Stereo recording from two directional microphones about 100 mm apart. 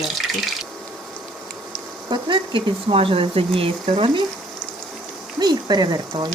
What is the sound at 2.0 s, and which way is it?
Speech, 50° right (ahead or behind).